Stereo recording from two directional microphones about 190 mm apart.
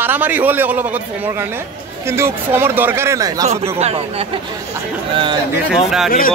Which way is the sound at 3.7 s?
35° right (ahead or behind).